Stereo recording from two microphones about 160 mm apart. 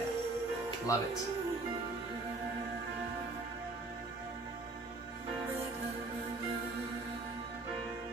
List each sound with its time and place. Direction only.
0.9 s speech: 20° left (ahead or behind)